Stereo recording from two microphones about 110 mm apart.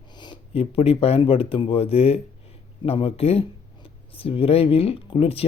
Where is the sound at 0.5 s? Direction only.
65° left (ahead or behind).